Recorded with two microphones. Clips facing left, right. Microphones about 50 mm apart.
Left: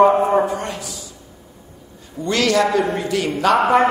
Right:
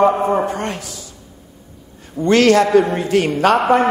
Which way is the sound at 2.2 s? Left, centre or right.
Right.